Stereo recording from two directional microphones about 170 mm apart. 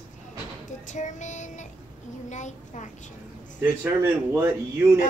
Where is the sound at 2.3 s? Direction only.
45° left (ahead or behind).